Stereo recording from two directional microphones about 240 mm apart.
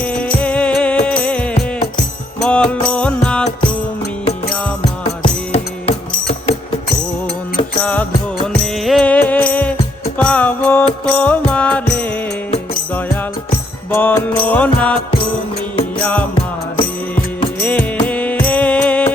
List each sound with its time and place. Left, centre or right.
0.0 s music: centre
4.8 s music: left
7.8 s music: centre
13.9 s music: centre
16.0 s music: centre
17.6 s music: centre